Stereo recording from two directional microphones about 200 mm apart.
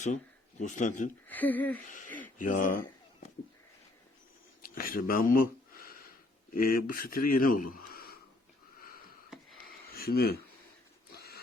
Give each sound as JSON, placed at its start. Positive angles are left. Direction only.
{"t": 0.6, "sound": "speech", "side_deg": 40}
{"t": 1.3, "sound": "speech", "side_deg": 10}
{"t": 1.8, "sound": "speech", "side_deg": 40}
{"t": 4.6, "sound": "speech", "side_deg": 45}
{"t": 9.9, "sound": "speech", "side_deg": 50}
{"t": 11.1, "sound": "a sound", "side_deg": 50}